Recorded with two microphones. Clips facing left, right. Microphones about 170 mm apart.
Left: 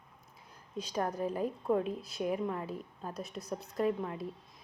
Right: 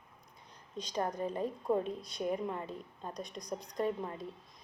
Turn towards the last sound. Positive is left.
turn(degrees=5)  # may be behind; listen again after turning